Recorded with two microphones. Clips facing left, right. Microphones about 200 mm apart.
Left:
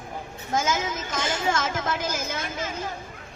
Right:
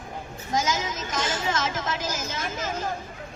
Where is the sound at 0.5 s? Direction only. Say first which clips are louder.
Left 1 dB; 55° left (ahead or behind).